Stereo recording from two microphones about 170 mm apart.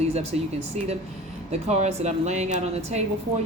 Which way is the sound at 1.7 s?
40° right (ahead or behind).